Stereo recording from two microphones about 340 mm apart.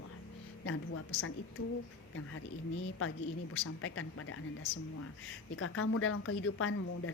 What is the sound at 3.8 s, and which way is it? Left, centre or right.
Speech, left.